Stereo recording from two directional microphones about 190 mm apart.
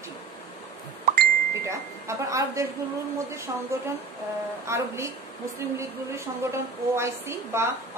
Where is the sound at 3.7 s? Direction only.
15° right (ahead or behind).